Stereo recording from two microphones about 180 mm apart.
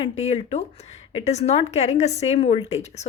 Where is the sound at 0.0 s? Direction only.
35° left (ahead or behind).